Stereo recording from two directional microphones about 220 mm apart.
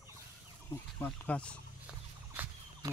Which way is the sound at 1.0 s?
5° left (ahead or behind).